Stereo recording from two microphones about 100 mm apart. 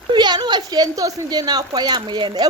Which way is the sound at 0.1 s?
45° right (ahead or behind).